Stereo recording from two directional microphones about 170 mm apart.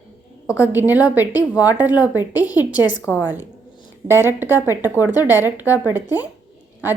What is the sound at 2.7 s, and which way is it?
Speech, 25° left (ahead or behind).